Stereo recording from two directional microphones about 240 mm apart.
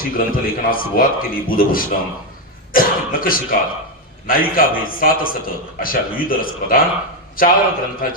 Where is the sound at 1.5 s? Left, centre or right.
Left.